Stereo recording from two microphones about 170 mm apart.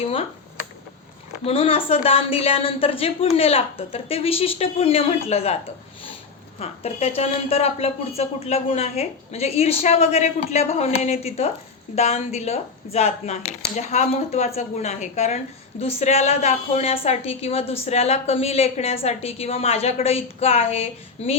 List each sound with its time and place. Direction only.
0.0 s a sound: 35° left (ahead or behind)
1.5 s a woman's voice: 35° left (ahead or behind)
6.6 s a woman's voice: 40° left (ahead or behind)